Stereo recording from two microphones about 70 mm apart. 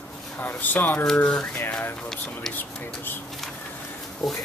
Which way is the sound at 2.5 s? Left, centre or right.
Left.